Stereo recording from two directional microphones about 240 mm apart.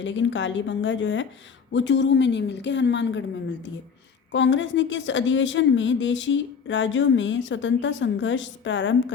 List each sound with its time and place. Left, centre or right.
0.0 s a woman's voice: left
4.3 s a woman's voice: left